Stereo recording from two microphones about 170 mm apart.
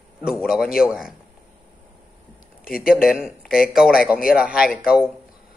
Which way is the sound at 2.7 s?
60° left (ahead or behind).